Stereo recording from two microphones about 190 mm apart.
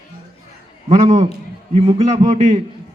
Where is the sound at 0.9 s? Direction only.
35° right (ahead or behind).